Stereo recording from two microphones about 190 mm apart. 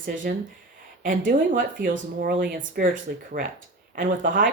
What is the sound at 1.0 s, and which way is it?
Speech, 45° right (ahead or behind).